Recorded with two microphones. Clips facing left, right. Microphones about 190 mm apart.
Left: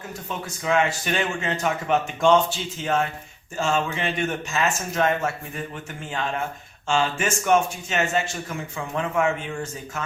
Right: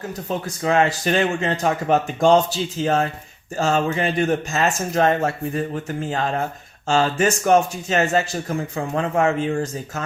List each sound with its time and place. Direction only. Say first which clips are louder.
0.3 s speech: right 4 dB; 35° right (ahead or behind)